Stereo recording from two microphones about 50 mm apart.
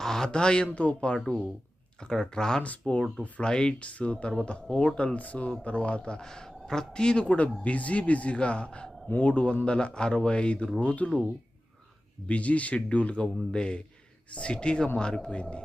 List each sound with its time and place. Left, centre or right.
0.0 s a sound: centre
0.3 s speech: centre
2.6 s speech: left
12.3 s speech: left